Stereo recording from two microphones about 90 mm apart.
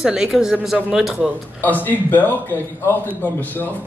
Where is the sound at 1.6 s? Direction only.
20° left (ahead or behind).